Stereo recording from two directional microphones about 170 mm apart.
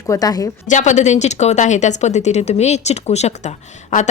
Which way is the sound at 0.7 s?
45° left (ahead or behind).